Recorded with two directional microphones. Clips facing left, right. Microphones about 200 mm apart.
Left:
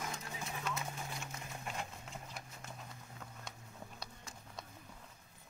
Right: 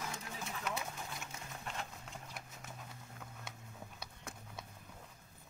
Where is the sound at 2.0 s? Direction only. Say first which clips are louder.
Left 1 dB; centre (ahead or behind).